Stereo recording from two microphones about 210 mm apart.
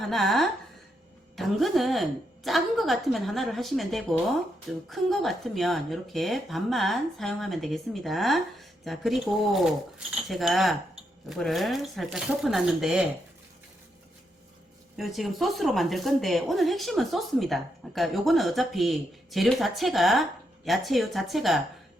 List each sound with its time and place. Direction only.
0.0 s a woman's voice: centre (ahead or behind)
14.9 s a woman's voice: centre (ahead or behind)